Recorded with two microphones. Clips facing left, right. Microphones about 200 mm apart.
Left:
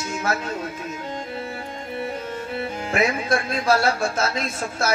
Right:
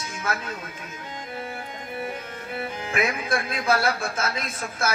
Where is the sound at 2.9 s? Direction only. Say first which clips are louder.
Left 4 dB; 25° left (ahead or behind).